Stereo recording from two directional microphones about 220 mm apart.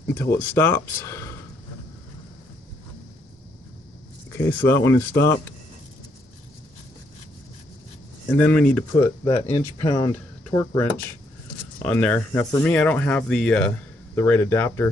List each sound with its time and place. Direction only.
0.0 s speech: 10° left (ahead or behind)
4.3 s speech: 10° left (ahead or behind)
8.3 s speech: 5° left (ahead or behind)
9.2 s speech: 25° left (ahead or behind); by 14.9 s 10° left (ahead or behind)